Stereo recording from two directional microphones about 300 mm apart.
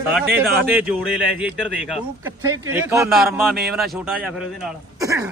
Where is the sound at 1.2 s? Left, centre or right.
Centre.